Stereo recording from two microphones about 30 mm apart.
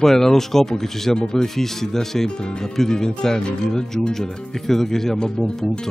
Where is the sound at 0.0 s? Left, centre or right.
Centre.